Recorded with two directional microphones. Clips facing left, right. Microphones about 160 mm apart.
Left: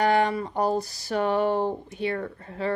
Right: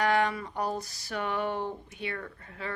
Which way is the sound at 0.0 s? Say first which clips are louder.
Left 5 dB; 30° left (ahead or behind).